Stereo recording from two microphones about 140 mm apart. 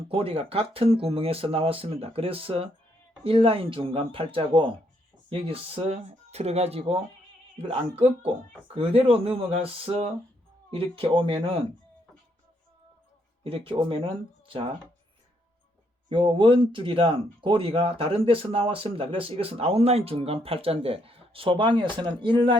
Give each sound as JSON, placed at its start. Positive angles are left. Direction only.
{"t": 0.1, "sound": "speech", "side_deg": -40}
{"t": 13.4, "sound": "speech", "side_deg": -40}
{"t": 16.0, "sound": "speech", "side_deg": -40}